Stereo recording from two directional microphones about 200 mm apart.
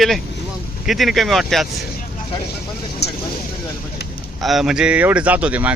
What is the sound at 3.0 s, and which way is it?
Vehicle, 55° left (ahead or behind).